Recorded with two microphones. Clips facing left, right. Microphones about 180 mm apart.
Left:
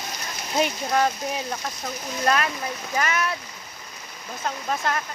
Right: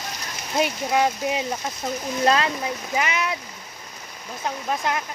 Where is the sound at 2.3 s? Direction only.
25° right (ahead or behind).